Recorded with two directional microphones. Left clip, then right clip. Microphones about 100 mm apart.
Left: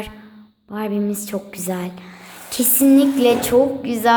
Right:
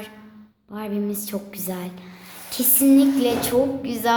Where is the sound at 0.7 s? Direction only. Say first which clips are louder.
Left 5 dB; 45° left (ahead or behind).